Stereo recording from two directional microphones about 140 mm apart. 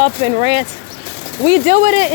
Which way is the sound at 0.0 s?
35° right (ahead or behind).